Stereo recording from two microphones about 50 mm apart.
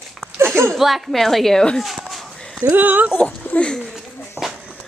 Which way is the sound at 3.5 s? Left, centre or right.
Left.